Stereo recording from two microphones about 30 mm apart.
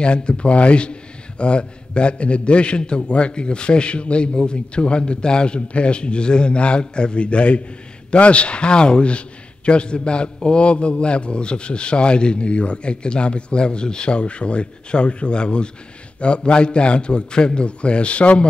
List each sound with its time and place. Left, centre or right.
0.0 s a man's voice: left